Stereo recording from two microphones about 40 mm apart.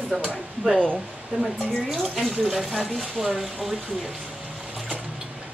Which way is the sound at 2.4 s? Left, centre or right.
Centre.